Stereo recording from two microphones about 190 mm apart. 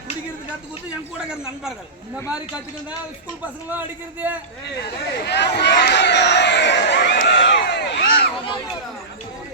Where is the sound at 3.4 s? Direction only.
10° right (ahead or behind).